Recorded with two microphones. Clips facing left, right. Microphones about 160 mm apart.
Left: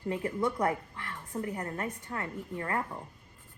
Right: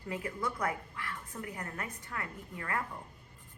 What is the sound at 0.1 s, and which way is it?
A woman's voice, 30° left (ahead or behind).